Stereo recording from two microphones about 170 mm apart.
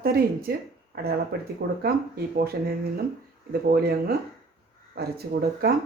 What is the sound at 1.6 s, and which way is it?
A woman's voice, 70° right (ahead or behind).